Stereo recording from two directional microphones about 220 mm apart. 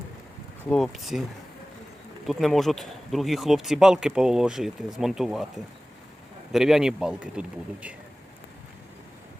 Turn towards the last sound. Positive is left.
turn(degrees=-5)  # may be behind; listen again after turning